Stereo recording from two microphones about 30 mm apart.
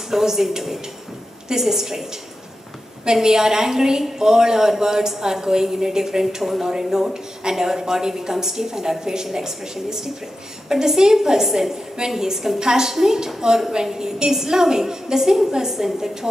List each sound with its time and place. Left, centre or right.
0.2 s a woman's voice: centre
3.1 s a woman's voice: centre
6.4 s a woman's voice: centre